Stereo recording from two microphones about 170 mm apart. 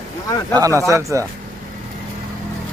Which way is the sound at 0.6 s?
20° right (ahead or behind).